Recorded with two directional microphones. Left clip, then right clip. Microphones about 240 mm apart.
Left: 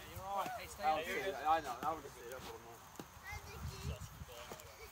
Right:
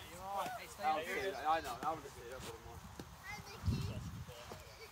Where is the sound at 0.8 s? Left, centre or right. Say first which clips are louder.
Left 1 dB; left.